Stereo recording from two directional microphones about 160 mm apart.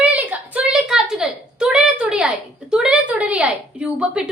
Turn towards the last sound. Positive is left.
turn(degrees=-5)  # may be behind; listen again after turning